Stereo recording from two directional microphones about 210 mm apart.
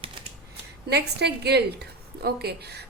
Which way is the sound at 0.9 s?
50° right (ahead or behind).